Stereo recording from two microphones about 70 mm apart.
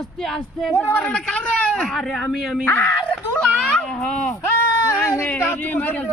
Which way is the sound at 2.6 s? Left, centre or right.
Left.